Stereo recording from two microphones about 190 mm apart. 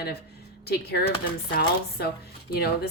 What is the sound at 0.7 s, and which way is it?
Speech, 55° left (ahead or behind).